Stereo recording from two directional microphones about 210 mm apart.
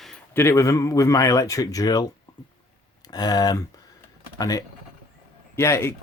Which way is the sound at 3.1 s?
20° left (ahead or behind).